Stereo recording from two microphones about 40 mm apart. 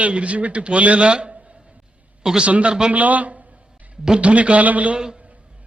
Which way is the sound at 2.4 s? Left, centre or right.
Right.